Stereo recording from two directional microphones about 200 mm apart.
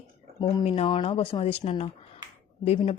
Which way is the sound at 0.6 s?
25° left (ahead or behind).